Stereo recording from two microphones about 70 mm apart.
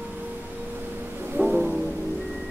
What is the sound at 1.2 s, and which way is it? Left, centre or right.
Music, right.